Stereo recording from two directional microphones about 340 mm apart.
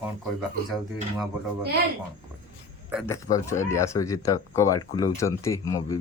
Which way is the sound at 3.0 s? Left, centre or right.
Centre.